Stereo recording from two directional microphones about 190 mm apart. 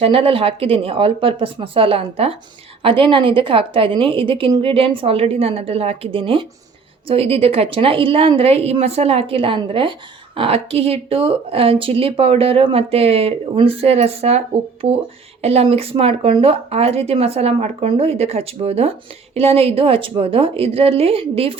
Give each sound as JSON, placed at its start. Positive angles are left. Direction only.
{"t": 0.0, "sound": "a woman's voice", "side_deg": -30}